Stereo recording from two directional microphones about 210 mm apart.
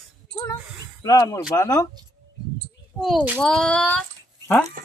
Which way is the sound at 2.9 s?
Centre (ahead or behind).